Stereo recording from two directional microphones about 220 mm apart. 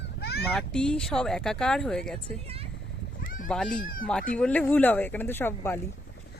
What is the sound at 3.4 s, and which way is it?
Speech, centre (ahead or behind).